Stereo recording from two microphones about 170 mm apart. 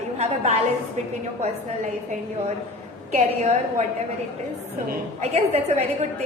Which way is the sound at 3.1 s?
45° right (ahead or behind).